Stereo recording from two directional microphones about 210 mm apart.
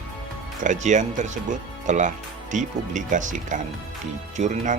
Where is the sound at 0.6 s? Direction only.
35° right (ahead or behind).